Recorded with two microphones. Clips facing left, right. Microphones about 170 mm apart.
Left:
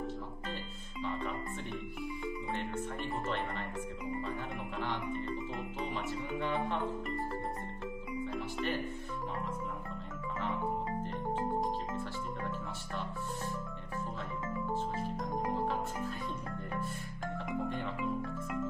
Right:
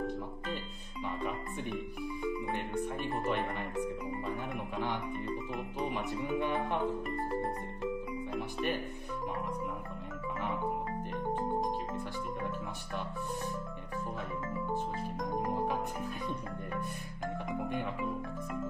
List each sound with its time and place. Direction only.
1.0 s music: 15° right (ahead or behind)
3.3 s speech: 15° right (ahead or behind)
4.3 s music: 15° right (ahead or behind)
8.3 s music: 20° right (ahead or behind)
11.5 s music: 15° right (ahead or behind)
15.5 s music: 15° right (ahead or behind)